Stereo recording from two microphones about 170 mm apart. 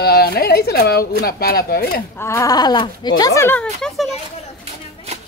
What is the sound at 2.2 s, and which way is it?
Speech, 15° left (ahead or behind).